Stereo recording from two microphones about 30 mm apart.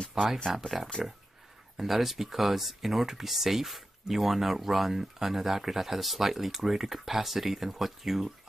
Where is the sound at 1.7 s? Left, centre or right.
Centre.